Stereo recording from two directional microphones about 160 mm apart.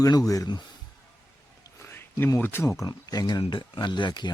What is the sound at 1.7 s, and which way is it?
Speech, 15° left (ahead or behind).